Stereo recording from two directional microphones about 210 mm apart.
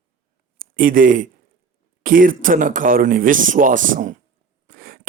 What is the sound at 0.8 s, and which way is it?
A man's voice, 40° right (ahead or behind).